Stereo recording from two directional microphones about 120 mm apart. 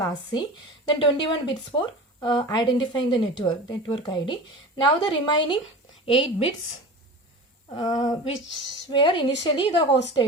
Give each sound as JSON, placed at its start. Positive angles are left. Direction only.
{"t": 0.0, "sound": "a woman's voice", "side_deg": 35}
{"t": 7.7, "sound": "a woman's voice", "side_deg": 35}